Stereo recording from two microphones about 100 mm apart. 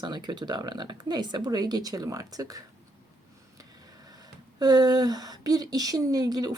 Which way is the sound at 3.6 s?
40° right (ahead or behind).